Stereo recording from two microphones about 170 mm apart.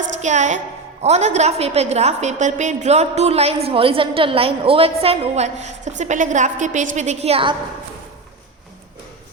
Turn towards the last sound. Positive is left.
turn(degrees=-35)  # may be behind; listen again after turning